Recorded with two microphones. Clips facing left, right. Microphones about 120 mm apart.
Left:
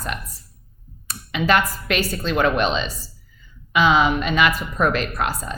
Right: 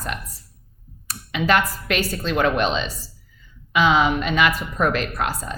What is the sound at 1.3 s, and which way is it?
Speech, 20° left (ahead or behind).